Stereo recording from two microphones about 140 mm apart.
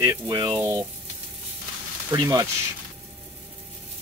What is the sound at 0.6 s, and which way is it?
Frying, 20° right (ahead or behind).